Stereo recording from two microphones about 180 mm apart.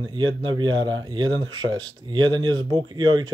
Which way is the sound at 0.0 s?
25° right (ahead or behind).